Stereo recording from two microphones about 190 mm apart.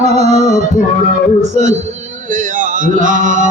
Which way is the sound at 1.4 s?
35° right (ahead or behind).